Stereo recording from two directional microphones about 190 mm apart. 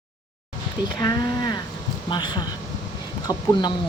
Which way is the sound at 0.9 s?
20° left (ahead or behind).